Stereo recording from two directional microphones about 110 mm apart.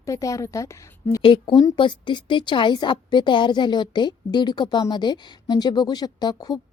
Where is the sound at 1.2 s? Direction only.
50° left (ahead or behind).